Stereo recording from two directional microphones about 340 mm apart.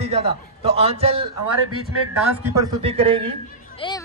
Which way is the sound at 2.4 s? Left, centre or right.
Centre.